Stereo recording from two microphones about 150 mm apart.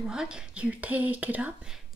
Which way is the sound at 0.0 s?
5° right (ahead or behind).